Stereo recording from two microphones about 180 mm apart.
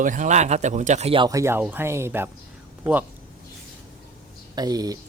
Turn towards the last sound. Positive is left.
turn(degrees=-20)  # may be behind; listen again after turning